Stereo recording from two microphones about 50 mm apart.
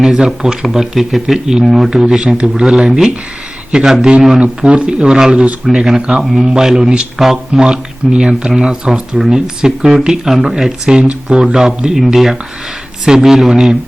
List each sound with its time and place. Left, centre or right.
0.0 s speech: centre
1.9 s a man's voice: centre
5.7 s speech: centre
6.0 s speech: centre
6.2 s speech: centre